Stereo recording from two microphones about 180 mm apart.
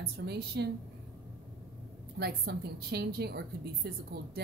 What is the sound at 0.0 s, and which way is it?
Speech, 65° right (ahead or behind).